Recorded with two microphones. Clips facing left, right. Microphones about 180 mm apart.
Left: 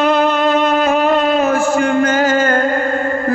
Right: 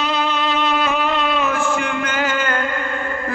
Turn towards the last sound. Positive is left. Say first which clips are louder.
# left 8 dB
turn(degrees=40)  # may be behind; listen again after turning